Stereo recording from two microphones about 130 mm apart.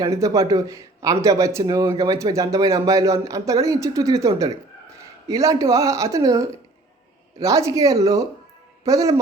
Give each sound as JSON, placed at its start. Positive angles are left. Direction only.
{"t": 0.0, "sound": "a man's voice", "side_deg": -30}